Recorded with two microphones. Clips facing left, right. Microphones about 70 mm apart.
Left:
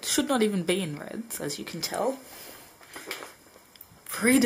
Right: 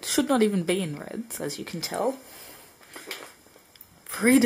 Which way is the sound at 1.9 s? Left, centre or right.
Centre.